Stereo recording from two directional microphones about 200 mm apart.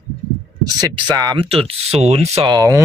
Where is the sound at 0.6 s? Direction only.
20° right (ahead or behind).